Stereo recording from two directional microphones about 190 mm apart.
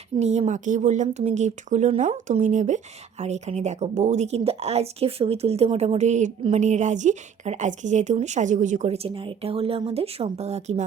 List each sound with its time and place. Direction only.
0.2 s speech: 35° right (ahead or behind)